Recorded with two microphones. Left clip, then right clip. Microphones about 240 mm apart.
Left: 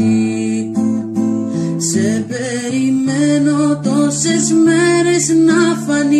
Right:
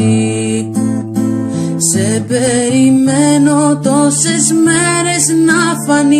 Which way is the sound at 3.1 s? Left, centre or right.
Right.